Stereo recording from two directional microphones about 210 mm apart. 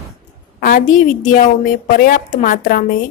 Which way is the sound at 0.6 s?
40° left (ahead or behind).